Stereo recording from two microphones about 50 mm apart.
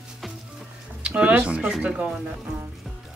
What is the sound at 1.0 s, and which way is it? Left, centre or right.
Speech, right.